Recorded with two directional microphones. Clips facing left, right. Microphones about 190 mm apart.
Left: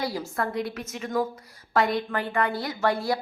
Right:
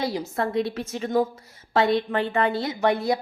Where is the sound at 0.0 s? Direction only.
20° right (ahead or behind).